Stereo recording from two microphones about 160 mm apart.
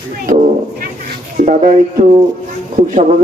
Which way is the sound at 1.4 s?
60° right (ahead or behind).